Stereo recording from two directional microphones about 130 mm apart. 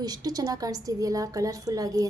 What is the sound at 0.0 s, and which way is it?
A woman's voice, 30° right (ahead or behind).